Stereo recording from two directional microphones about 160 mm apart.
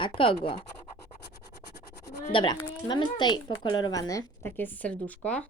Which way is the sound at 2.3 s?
30° left (ahead or behind).